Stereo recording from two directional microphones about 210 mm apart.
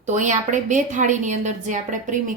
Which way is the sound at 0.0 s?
35° right (ahead or behind).